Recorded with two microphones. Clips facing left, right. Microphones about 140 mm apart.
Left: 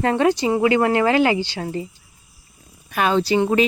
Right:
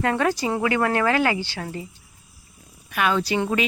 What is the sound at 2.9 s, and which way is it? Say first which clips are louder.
Speech: left 4 dB; 30° left (ahead or behind).